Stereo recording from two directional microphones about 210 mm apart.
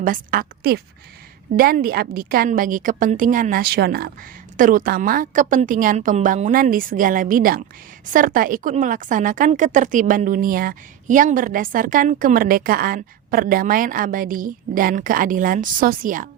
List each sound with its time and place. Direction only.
0.0 s a woman's voice: 40° right (ahead or behind)